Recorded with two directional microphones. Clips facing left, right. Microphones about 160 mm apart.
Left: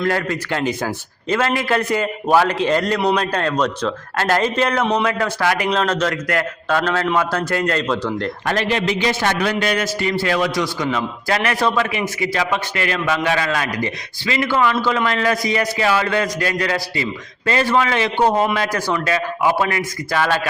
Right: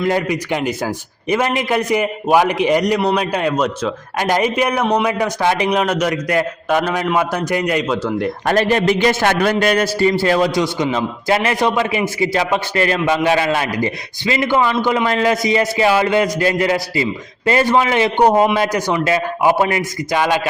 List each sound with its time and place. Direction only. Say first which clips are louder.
0.1 s a man's voice: right 3 dB; 15° right (ahead or behind)
8.4 s a man's voice: right 5 dB; 40° right (ahead or behind); by 20.5 s 15° right (ahead or behind)